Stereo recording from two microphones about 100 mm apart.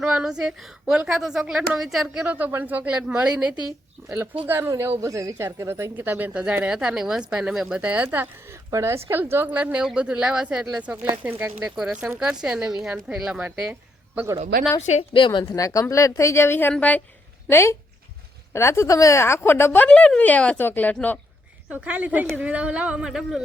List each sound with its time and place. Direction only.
0.0 s a woman's voice: 5° right (ahead or behind)
2.2 s speech: 15° right (ahead or behind)
4.4 s speech: 20° right (ahead or behind)
14.8 s a woman's voice: 60° left (ahead or behind)
15.6 s a woman's voice: 35° left (ahead or behind); by 17.0 s 15° left (ahead or behind)
17.5 s speech: 25° left (ahead or behind)
21.8 s speech: 15° right (ahead or behind)